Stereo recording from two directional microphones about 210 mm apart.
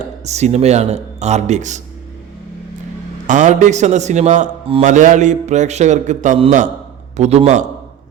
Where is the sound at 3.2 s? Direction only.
35° right (ahead or behind).